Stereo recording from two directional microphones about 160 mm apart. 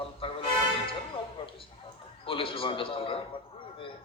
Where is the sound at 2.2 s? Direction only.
35° left (ahead or behind).